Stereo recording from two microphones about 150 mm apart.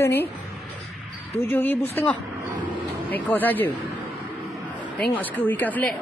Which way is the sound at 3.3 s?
10° left (ahead or behind).